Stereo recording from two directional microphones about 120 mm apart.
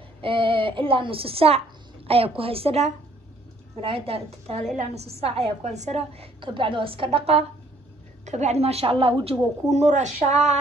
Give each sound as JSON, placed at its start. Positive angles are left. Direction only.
{"t": 0.2, "sound": "a woman's voice", "side_deg": -45}
{"t": 8.3, "sound": "a woman's voice", "side_deg": -65}
{"t": 9.7, "sound": "speech", "side_deg": -75}